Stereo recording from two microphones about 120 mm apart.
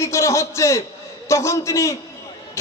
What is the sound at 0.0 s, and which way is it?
A man's voice, 25° left (ahead or behind).